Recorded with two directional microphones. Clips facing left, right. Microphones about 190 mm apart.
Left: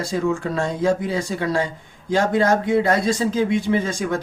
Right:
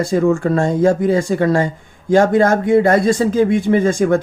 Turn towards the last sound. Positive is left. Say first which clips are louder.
# right 8 dB
turn(degrees=-50)  # may be behind; listen again after turning